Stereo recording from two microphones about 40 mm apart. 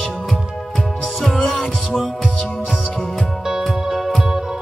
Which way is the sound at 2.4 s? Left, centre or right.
Left.